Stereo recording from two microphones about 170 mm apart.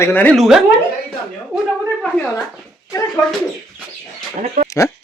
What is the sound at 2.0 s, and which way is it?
Speech, 5° left (ahead or behind).